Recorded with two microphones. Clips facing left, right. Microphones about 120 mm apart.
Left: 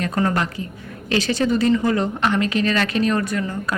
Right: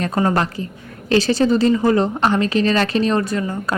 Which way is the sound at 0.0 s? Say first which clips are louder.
Right 3 dB; 30° right (ahead or behind).